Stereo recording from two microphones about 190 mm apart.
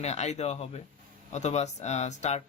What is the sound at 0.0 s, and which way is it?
Speech, 35° left (ahead or behind).